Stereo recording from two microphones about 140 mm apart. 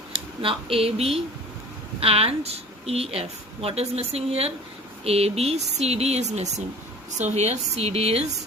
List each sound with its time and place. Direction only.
0.1 s a woman's voice: 40° right (ahead or behind)